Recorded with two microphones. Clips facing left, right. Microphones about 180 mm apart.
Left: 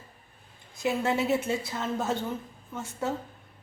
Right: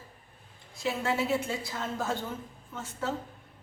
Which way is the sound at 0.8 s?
20° left (ahead or behind).